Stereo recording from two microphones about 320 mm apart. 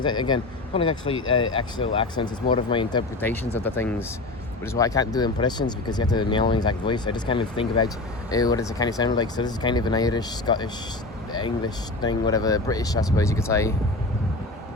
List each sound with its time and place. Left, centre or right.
0.0 s speech: centre
1.1 s speech: left
1.5 s speech: centre